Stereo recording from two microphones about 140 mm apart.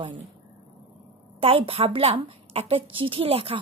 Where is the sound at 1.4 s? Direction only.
45° right (ahead or behind).